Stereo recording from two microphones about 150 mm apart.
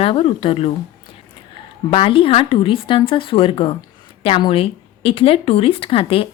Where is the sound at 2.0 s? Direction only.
35° left (ahead or behind).